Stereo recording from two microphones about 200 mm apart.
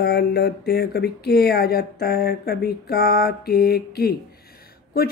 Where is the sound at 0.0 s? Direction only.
55° left (ahead or behind).